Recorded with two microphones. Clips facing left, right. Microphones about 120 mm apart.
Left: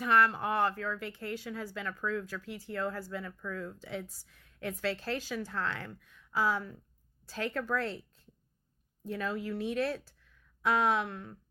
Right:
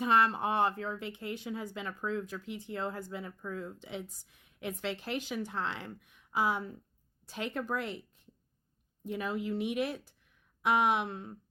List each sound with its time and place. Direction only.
0.0 s speech: 20° right (ahead or behind)
9.0 s speech: 15° right (ahead or behind)